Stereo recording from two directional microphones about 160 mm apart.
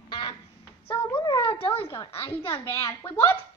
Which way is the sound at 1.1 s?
30° left (ahead or behind).